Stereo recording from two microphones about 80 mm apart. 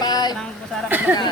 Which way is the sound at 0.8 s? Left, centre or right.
Centre.